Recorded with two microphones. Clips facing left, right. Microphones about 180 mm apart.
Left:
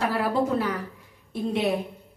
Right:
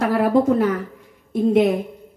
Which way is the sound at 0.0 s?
45° right (ahead or behind).